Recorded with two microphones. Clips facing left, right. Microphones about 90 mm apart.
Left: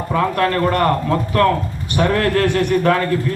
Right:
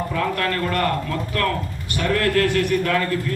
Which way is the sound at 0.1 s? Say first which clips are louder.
Left 10 dB; 35° left (ahead or behind).